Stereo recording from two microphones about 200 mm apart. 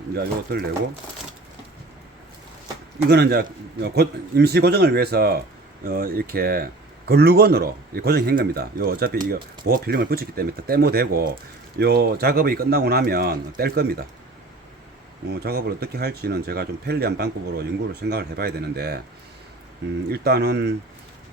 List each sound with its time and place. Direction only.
0.1 s speech: 50° right (ahead or behind)
3.1 s speech: 55° right (ahead or behind)
15.3 s speech: 50° right (ahead or behind)
20.1 s speech: 55° right (ahead or behind)